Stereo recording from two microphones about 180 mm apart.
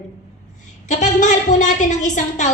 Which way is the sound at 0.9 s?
40° left (ahead or behind).